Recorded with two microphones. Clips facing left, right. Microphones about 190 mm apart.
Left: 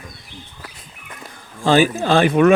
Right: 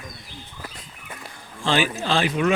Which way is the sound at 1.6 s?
45° left (ahead or behind).